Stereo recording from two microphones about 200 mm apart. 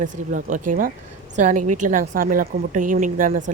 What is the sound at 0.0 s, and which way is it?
Speech, 40° right (ahead or behind).